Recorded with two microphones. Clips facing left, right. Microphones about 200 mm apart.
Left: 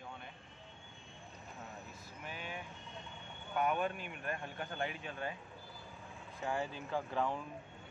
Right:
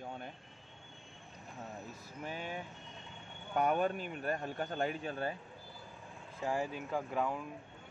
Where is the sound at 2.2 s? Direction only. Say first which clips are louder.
Right 5 dB; 40° right (ahead or behind).